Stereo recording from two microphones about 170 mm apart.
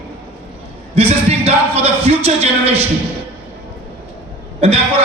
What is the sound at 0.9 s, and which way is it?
Speech, 35° right (ahead or behind).